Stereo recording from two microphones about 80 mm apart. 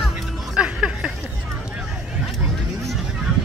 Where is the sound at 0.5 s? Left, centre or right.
Centre.